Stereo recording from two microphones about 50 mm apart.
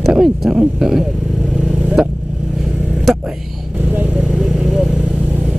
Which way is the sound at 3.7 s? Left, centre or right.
Right.